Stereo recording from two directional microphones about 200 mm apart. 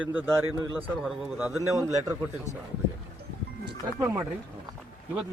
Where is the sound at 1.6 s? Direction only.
15° right (ahead or behind).